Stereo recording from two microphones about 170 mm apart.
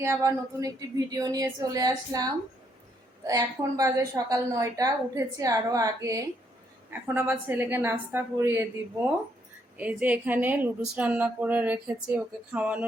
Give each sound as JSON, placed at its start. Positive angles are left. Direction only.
{"t": 0.0, "sound": "a woman's voice", "side_deg": -15}
{"t": 9.7, "sound": "a woman's voice", "side_deg": -10}